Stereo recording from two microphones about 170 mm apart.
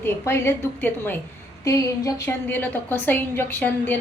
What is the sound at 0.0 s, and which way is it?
A woman's voice, 15° left (ahead or behind).